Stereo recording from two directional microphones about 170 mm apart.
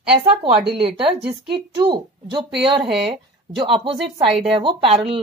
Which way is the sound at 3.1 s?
30° right (ahead or behind).